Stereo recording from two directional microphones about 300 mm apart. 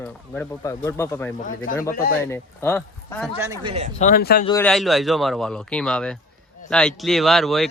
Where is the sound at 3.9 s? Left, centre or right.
Left.